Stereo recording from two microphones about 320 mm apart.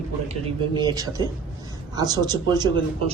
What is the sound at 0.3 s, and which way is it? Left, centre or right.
A man's voice, centre.